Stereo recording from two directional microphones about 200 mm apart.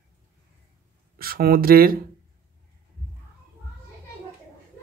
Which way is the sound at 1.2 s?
50° right (ahead or behind).